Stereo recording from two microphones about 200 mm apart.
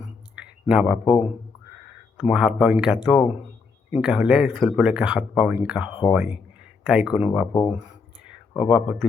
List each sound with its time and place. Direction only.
0.3 s speech: 5° right (ahead or behind)
2.3 s speech: 5° right (ahead or behind)
7.5 s speech: 20° left (ahead or behind)
8.7 s speech: 5° right (ahead or behind)